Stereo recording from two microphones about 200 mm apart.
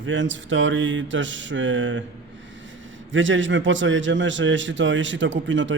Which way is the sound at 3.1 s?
70° right (ahead or behind).